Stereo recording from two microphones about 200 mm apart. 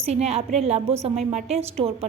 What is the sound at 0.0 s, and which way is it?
A woman's voice, 30° right (ahead or behind).